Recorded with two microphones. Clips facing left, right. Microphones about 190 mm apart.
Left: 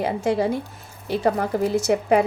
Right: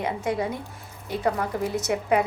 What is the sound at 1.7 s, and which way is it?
Speech, 30° left (ahead or behind).